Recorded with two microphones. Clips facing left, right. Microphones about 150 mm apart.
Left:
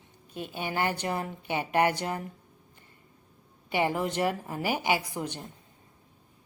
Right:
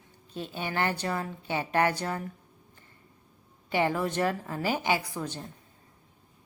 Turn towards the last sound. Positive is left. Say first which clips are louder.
# even
turn(degrees=15)  # may be behind; listen again after turning